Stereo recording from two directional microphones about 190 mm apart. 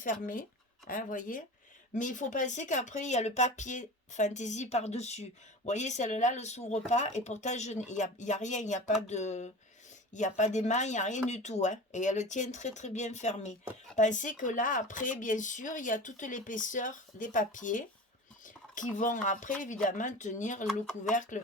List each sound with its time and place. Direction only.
0.0 s speech: 45° left (ahead or behind)